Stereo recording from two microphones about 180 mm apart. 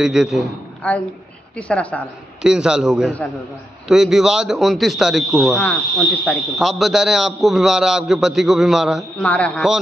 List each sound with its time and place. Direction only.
0.0 s a man's voice: 5° right (ahead or behind)
0.8 s a woman's voice: 10° left (ahead or behind)
2.4 s a man's voice: 5° right (ahead or behind)